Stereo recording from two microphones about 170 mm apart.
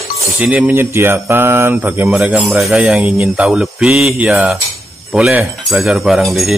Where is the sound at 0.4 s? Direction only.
10° right (ahead or behind).